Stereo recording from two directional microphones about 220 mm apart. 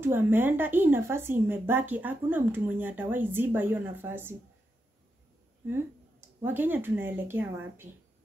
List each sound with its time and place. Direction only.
0.0 s speech: 10° right (ahead or behind)
6.4 s speech: 10° right (ahead or behind)